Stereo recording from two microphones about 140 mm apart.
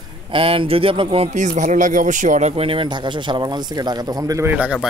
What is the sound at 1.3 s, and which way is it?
Speech, 60° right (ahead or behind).